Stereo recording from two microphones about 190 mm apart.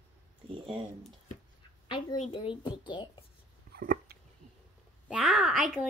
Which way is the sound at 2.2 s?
25° left (ahead or behind).